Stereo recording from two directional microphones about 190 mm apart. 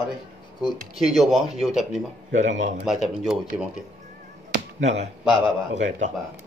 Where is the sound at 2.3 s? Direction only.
40° right (ahead or behind).